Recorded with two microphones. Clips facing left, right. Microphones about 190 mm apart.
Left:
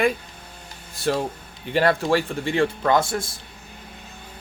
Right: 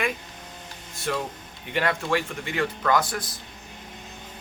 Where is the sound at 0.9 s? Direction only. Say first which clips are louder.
Left 5 dB; 35° left (ahead or behind).